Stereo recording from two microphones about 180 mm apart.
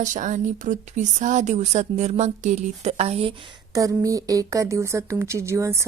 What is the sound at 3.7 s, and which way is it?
A woman's voice, 20° right (ahead or behind).